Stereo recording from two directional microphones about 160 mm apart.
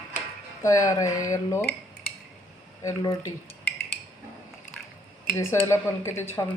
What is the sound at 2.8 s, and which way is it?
Speech, 20° left (ahead or behind).